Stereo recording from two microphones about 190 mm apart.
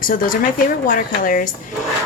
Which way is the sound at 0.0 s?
45° left (ahead or behind).